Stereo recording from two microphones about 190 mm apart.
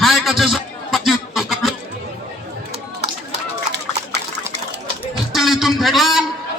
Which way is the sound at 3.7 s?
60° right (ahead or behind).